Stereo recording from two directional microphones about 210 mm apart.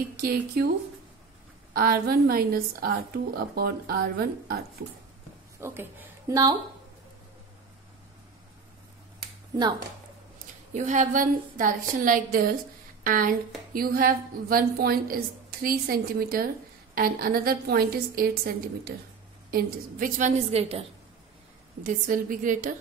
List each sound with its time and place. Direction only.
0.2 s a woman's voice: 45° right (ahead or behind)
1.7 s a woman's voice: 45° right (ahead or behind)
5.6 s speech: 10° right (ahead or behind)
10.7 s a woman's voice: 35° right (ahead or behind)
21.8 s a woman's voice: 40° right (ahead or behind)